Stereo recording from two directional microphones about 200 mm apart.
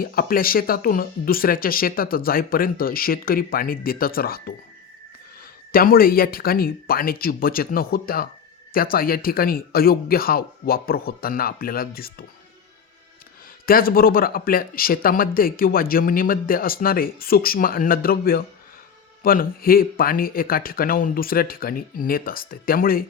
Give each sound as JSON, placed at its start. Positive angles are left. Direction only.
{"t": 0.0, "sound": "a man's voice", "side_deg": 45}
{"t": 5.7, "sound": "a man's voice", "side_deg": 45}
{"t": 13.7, "sound": "a man's voice", "side_deg": 45}